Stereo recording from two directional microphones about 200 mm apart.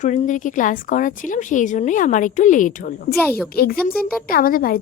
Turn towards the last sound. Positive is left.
turn(degrees=45)  # may be behind; listen again after turning